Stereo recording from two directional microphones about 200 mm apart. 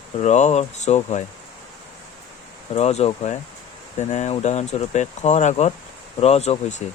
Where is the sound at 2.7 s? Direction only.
30° left (ahead or behind).